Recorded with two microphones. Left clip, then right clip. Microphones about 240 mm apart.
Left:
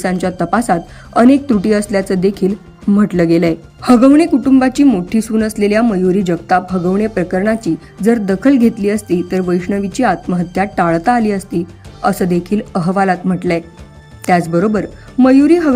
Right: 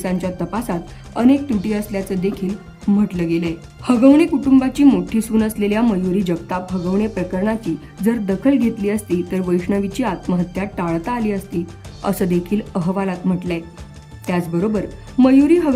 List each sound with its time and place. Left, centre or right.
0.0 s speech: centre